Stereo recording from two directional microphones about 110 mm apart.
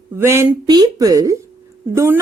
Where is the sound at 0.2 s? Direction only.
25° right (ahead or behind).